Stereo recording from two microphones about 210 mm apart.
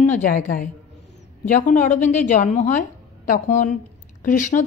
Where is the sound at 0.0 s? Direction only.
35° left (ahead or behind).